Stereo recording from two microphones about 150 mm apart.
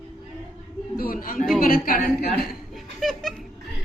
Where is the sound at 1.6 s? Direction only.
70° left (ahead or behind).